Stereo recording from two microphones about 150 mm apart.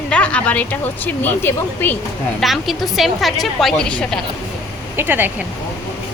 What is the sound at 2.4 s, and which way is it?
A woman's voice, centre (ahead or behind).